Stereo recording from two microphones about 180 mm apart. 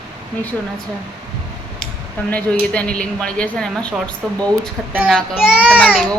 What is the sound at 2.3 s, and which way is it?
Speech, 10° left (ahead or behind).